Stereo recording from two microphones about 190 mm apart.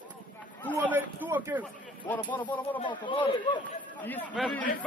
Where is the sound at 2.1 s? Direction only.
10° left (ahead or behind).